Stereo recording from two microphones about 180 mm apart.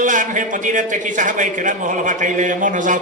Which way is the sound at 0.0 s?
45° right (ahead or behind).